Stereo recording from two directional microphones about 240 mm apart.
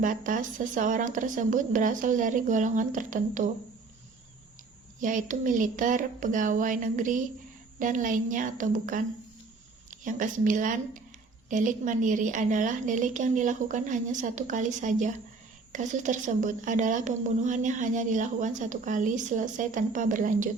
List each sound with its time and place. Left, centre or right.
0.0 s a woman's voice: right
4.9 s a woman's voice: right